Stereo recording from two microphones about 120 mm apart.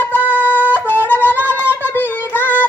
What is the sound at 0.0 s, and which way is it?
Music, 15° left (ahead or behind).